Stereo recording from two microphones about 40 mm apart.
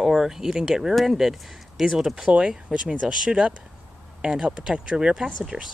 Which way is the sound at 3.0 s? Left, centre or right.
Right.